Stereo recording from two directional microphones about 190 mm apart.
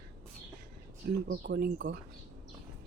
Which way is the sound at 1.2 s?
60° right (ahead or behind).